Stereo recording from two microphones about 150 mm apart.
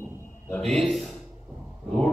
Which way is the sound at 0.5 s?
5° left (ahead or behind).